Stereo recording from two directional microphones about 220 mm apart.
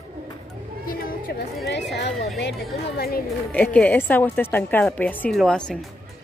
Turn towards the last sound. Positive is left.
turn(degrees=5)  # may be behind; listen again after turning